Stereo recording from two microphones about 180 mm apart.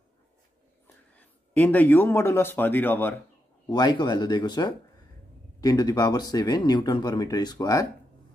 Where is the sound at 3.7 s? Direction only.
25° left (ahead or behind).